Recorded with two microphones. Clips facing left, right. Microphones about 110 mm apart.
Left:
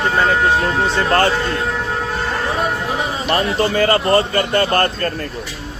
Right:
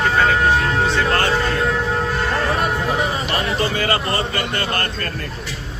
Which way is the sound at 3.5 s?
40° left (ahead or behind).